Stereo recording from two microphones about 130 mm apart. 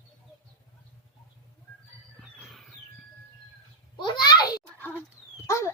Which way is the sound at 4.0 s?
35° left (ahead or behind).